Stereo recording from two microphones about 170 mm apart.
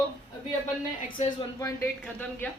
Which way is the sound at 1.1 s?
25° left (ahead or behind).